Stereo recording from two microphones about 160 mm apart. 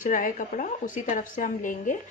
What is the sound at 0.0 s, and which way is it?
A woman's voice, 55° left (ahead or behind).